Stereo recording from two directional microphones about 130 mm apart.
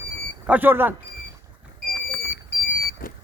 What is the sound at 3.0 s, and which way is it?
Vehicle, 90° left.